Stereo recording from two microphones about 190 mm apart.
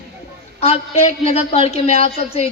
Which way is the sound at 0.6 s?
35° left (ahead or behind).